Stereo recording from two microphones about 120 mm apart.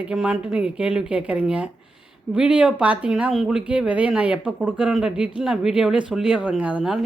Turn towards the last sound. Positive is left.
turn(degrees=-5)  # may be behind; listen again after turning